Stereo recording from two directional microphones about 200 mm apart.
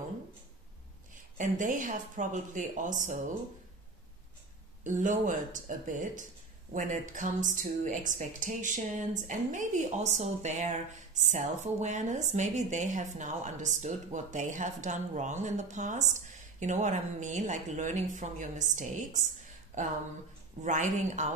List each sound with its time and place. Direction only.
1.1 s speech: 40° right (ahead or behind)
4.8 s speech: 40° right (ahead or behind)